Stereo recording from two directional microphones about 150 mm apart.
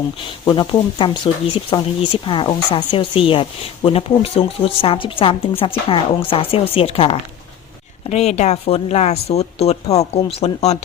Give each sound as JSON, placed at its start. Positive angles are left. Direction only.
{"t": 0.4, "sound": "a woman's voice", "side_deg": 30}